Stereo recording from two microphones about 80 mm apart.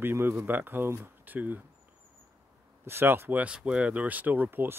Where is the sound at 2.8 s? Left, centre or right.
Right.